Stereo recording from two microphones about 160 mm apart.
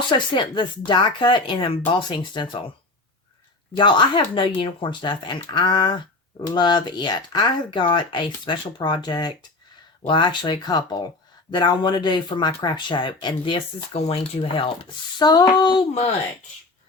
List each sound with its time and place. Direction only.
0.1 s speech: 30° left (ahead or behind)
3.8 s speech: 30° left (ahead or behind)
15.2 s speech: 25° left (ahead or behind)